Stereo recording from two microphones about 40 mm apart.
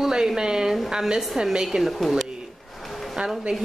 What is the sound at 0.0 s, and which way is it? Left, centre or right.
A woman's voice, centre.